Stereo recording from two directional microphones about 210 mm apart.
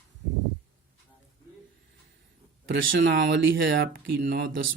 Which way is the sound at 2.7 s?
60° right (ahead or behind).